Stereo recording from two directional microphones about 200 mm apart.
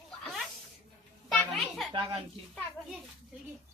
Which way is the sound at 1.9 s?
25° right (ahead or behind).